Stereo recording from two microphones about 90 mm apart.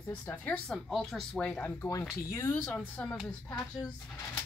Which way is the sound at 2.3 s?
30° left (ahead or behind).